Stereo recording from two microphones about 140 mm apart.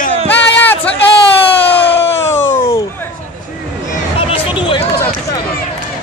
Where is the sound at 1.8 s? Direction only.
15° left (ahead or behind).